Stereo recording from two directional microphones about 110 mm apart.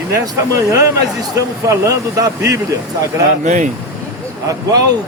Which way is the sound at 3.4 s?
90° right.